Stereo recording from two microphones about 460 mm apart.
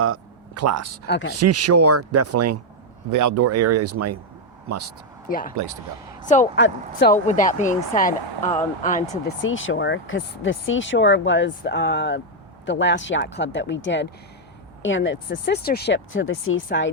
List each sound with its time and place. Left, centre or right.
0.0 s speech: right
1.0 s speech: left
1.3 s speech: right
5.3 s speech: centre